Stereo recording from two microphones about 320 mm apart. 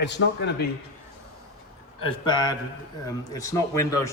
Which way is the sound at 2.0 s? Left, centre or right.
Centre.